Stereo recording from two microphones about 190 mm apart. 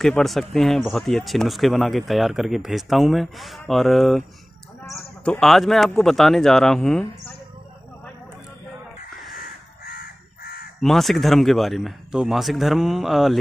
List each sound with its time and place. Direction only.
0.0 s speech: centre (ahead or behind)
9.8 s crow: 50° left (ahead or behind)
10.8 s speech: centre (ahead or behind)